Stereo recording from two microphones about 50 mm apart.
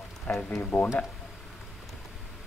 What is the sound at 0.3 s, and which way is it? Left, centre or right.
Speech, left.